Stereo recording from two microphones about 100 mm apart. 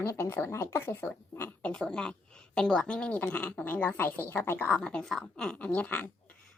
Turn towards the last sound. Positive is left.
turn(degrees=15)  # may be behind; listen again after turning